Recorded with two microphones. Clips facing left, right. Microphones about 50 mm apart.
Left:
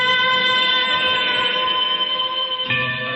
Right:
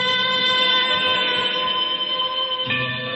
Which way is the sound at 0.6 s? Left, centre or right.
Centre.